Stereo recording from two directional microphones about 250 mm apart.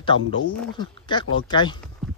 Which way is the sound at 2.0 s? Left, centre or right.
Centre.